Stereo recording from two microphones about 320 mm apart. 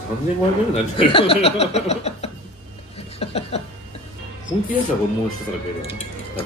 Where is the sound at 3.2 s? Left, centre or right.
Centre.